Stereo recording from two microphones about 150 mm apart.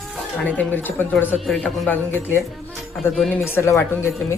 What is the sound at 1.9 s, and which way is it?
Speech, 15° left (ahead or behind).